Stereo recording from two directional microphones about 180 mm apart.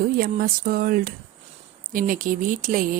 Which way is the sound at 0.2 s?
55° right (ahead or behind).